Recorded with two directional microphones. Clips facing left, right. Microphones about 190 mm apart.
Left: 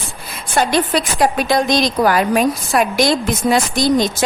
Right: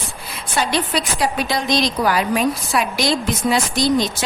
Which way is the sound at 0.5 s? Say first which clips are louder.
Left 5 dB; 50° left (ahead or behind).